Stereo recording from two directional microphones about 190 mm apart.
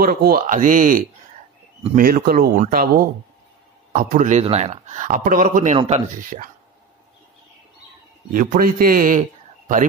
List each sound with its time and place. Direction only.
0.0 s speech: 50° right (ahead or behind)
8.3 s speech: 50° right (ahead or behind)